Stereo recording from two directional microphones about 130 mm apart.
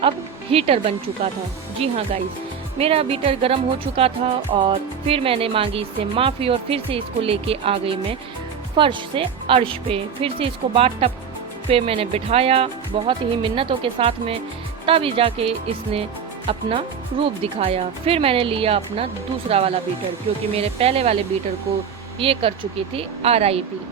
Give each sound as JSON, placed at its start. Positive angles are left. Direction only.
{"t": 0.5, "sound": "speech", "side_deg": -50}
{"t": 22.2, "sound": "speech", "side_deg": -45}